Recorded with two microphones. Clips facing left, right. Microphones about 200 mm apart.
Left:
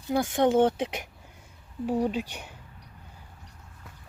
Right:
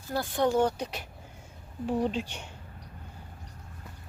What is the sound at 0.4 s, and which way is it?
Speech, 25° left (ahead or behind).